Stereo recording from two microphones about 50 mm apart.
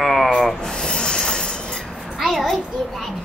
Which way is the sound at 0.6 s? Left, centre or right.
Centre.